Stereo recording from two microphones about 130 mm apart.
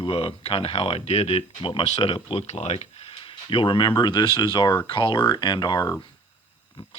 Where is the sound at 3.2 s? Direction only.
40° left (ahead or behind).